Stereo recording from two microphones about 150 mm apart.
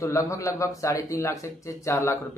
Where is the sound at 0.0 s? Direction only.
20° left (ahead or behind).